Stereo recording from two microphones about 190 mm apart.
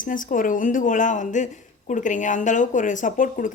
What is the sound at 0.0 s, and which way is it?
Speech, 45° left (ahead or behind).